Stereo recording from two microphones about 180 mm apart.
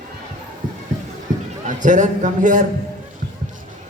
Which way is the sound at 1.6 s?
45° right (ahead or behind).